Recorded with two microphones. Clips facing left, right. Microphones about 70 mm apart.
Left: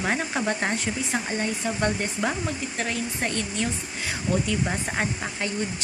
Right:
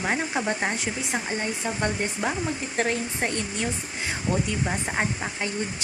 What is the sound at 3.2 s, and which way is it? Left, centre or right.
Speech, centre.